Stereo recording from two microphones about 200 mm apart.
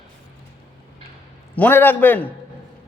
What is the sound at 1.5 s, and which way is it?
Speech, 10° left (ahead or behind).